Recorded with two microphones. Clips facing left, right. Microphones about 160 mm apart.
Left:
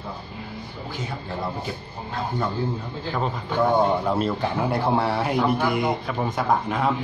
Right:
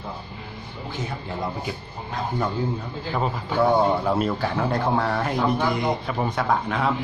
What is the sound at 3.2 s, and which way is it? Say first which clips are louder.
Speech: right 1 dB; 5° right (ahead or behind).